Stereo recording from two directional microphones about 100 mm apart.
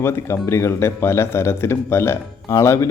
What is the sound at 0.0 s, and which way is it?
Speech, 25° left (ahead or behind).